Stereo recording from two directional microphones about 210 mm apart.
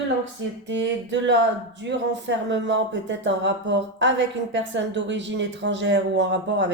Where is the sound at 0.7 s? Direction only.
60° right (ahead or behind).